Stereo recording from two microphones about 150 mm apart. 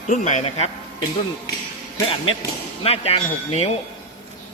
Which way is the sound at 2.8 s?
40° left (ahead or behind).